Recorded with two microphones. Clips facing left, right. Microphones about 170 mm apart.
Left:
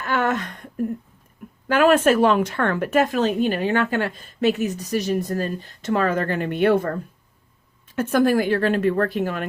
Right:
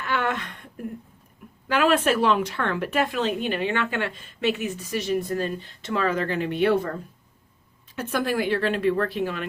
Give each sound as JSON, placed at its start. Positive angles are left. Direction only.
{"t": 0.0, "sound": "a sound", "side_deg": 45}
{"t": 1.6, "sound": "a woman's voice", "side_deg": 45}
{"t": 7.9, "sound": "a woman's voice", "side_deg": 45}